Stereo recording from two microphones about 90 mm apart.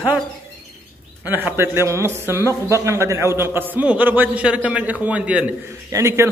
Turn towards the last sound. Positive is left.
turn(degrees=-30)  # may be behind; listen again after turning